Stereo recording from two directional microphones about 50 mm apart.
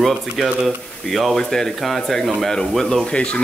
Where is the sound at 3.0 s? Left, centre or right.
Left.